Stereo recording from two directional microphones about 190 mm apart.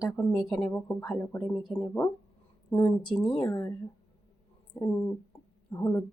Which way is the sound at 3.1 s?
5° left (ahead or behind).